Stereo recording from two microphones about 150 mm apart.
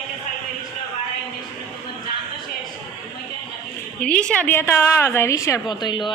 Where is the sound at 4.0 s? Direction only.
5° left (ahead or behind); by 6.1 s 30° left (ahead or behind).